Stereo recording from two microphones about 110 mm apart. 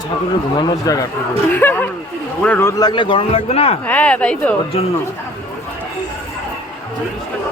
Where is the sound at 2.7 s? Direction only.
40° left (ahead or behind); by 3.8 s 60° left (ahead or behind).